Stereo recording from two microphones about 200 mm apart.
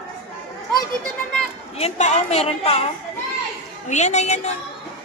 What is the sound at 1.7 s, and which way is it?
A woman's voice, 35° left (ahead or behind).